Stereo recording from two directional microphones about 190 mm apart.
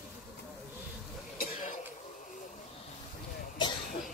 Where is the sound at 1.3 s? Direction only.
45° left (ahead or behind).